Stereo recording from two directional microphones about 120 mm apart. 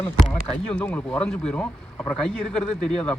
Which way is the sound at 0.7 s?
15° left (ahead or behind).